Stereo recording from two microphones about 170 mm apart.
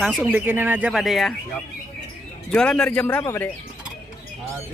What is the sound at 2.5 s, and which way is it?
A man's voice, 5° left (ahead or behind).